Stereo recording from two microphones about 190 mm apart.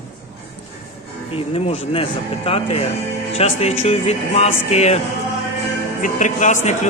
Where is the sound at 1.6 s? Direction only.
30° left (ahead or behind).